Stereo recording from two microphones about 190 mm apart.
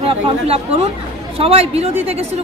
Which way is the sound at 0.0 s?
30° right (ahead or behind).